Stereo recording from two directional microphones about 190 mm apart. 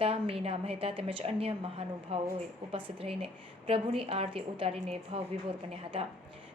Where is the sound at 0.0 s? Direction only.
30° right (ahead or behind).